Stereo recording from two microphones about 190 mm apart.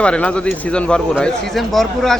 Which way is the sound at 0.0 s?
5° left (ahead or behind).